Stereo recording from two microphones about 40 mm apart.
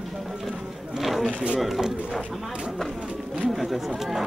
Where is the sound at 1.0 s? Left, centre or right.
Centre.